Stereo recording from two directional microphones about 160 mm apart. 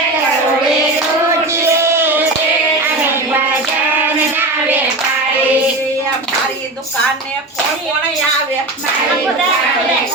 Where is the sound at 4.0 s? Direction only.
10° right (ahead or behind).